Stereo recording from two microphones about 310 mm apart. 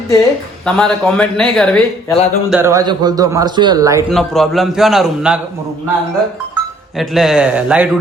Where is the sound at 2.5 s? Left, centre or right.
Centre.